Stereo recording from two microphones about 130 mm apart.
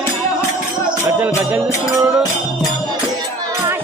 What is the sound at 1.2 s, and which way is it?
Music, 15° right (ahead or behind).